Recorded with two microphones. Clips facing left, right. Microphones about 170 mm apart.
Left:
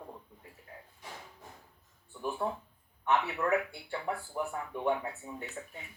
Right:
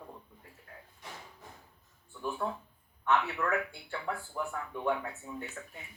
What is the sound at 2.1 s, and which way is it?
Speech, 15° left (ahead or behind).